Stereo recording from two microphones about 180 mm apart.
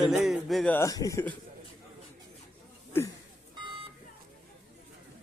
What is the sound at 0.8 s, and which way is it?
Speech, 20° left (ahead or behind).